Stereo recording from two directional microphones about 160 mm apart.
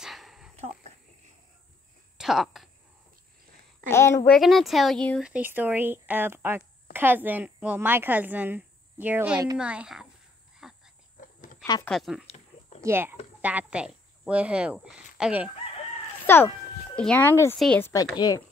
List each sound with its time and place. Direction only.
0.0 s a sound: centre (ahead or behind)
2.1 s speech: centre (ahead or behind)
3.9 s speech: 15° left (ahead or behind)
4.3 s speech: centre (ahead or behind)
5.2 s a woman's voice: 10° right (ahead or behind)
10.6 s a sound: 5° right (ahead or behind)
11.8 s speech: centre (ahead or behind)
12.3 s a sound: 45° left (ahead or behind)
12.8 s a woman's voice: 15° right (ahead or behind)
16.3 s speech: 15° left (ahead or behind)
18.1 s speech: 25° left (ahead or behind)